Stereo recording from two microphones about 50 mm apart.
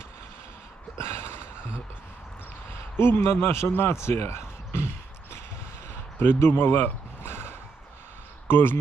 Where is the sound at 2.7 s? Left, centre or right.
Left.